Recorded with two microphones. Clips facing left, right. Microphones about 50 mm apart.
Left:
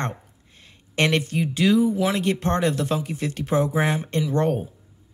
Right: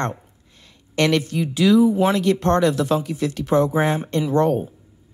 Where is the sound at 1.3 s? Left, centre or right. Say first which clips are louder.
Right 3 dB; centre.